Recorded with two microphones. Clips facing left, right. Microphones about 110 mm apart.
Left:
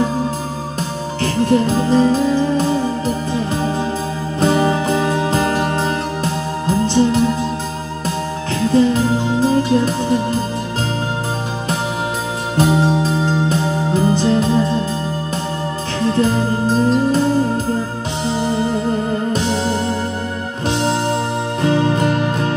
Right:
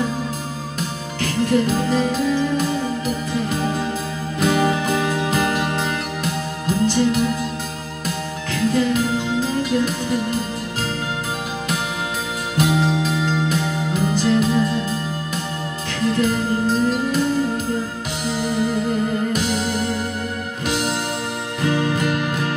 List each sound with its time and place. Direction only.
1.2 s music: 35° left (ahead or behind)
4.4 s music: 30° left (ahead or behind)
8.7 s music: 35° left (ahead or behind)
12.5 s music: 35° left (ahead or behind)
16.1 s music: 35° left (ahead or behind)